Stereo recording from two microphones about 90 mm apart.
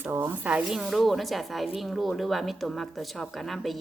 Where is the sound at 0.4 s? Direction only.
10° right (ahead or behind).